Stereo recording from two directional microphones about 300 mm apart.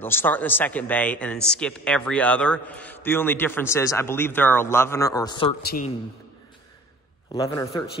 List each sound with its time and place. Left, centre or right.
0.0 s a man's voice: centre
5.6 s a man's voice: left
7.3 s a man's voice: centre